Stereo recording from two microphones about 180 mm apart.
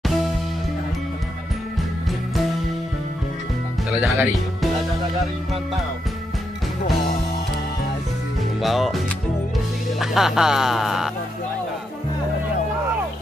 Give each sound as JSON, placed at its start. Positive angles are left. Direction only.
{"t": 4.0, "sound": "speech", "side_deg": 0}
{"t": 6.8, "sound": "music", "side_deg": 45}
{"t": 8.6, "sound": "speech", "side_deg": 0}